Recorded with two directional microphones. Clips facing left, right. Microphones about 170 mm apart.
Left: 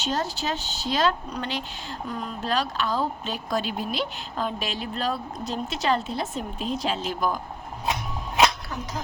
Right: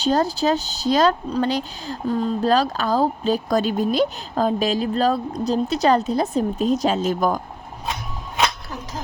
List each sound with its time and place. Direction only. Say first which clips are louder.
0.0 s speech: right 9 dB; 35° right (ahead or behind)